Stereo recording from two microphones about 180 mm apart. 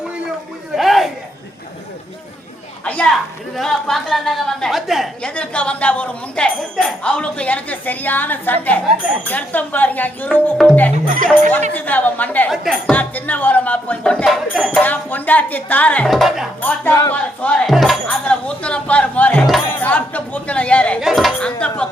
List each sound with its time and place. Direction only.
0.8 s a sound: centre (ahead or behind)
2.8 s a sound: 5° left (ahead or behind)
3.5 s a woman's voice: centre (ahead or behind)
10.9 s speech: 45° right (ahead or behind)
11.7 s speech: 10° left (ahead or behind)
16.6 s speech: 10° left (ahead or behind)